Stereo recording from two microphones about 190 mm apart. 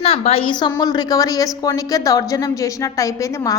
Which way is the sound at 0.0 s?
30° left (ahead or behind).